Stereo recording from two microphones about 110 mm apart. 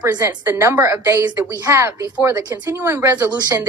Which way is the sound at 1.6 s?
25° right (ahead or behind).